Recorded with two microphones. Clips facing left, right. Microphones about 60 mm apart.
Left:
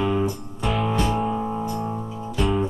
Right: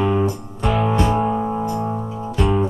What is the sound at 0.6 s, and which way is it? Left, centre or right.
Music, centre.